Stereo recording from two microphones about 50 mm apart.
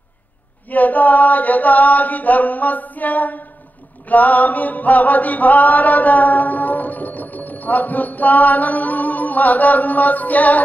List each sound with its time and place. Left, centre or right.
0.7 s music: left